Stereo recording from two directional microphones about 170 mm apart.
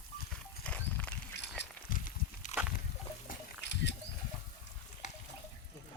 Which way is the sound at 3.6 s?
90° left.